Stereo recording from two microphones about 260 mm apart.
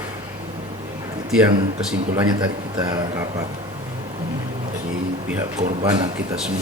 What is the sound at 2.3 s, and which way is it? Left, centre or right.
Speech, centre.